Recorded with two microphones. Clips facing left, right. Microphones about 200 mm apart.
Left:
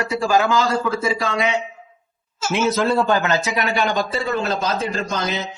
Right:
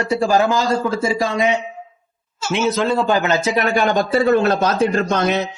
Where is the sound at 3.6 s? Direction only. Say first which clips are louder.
Right 4 dB; 50° right (ahead or behind).